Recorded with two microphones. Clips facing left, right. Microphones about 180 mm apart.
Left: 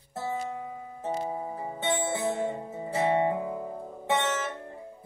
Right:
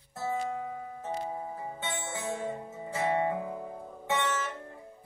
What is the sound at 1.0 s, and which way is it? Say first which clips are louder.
Music: left 5 dB; 35° left (ahead or behind).